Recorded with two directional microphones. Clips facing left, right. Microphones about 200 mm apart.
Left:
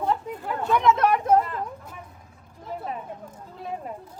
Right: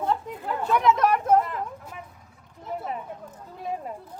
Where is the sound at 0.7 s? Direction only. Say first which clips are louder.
Left 1 dB; 5° right (ahead or behind).